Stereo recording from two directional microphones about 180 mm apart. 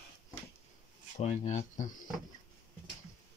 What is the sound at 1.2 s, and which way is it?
Speech, 40° left (ahead or behind).